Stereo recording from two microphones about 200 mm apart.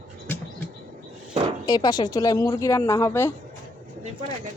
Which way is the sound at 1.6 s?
20° left (ahead or behind).